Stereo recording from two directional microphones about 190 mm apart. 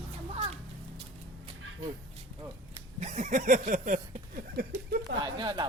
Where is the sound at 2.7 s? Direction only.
35° right (ahead or behind).